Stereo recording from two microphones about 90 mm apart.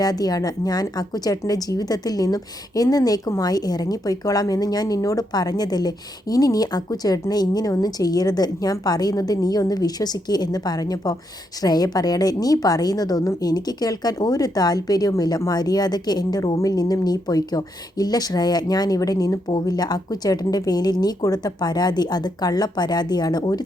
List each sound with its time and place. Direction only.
0.0 s speech: 45° left (ahead or behind)
19.5 s speech: 55° left (ahead or behind)